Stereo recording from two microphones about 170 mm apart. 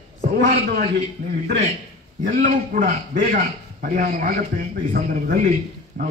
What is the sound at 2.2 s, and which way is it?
A man's voice, 50° right (ahead or behind).